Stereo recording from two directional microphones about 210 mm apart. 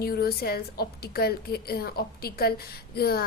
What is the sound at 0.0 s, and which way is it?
A woman's voice, 45° left (ahead or behind).